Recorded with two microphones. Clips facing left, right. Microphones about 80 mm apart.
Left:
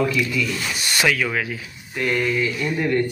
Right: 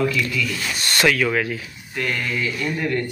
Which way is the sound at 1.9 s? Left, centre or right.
Centre.